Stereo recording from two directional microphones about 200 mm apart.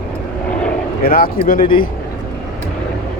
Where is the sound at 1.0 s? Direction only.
45° left (ahead or behind).